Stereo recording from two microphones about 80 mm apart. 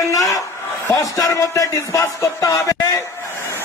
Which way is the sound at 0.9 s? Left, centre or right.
Left.